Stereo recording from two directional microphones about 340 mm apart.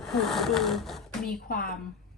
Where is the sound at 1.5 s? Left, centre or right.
Left.